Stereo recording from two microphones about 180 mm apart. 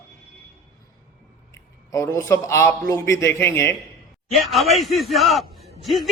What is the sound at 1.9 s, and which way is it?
Speech, 15° left (ahead or behind).